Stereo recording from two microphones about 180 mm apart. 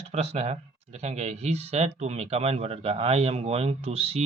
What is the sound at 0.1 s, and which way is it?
Speech, 35° right (ahead or behind).